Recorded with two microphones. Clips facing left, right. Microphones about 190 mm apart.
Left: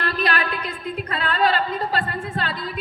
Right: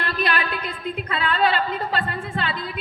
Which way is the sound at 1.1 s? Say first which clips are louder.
Right 2 dB; 45° left (ahead or behind).